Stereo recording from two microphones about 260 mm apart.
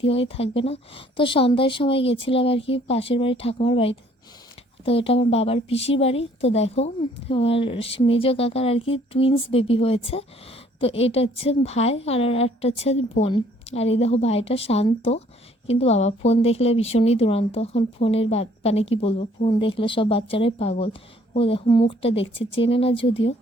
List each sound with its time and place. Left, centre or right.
0.0 s a woman's voice: left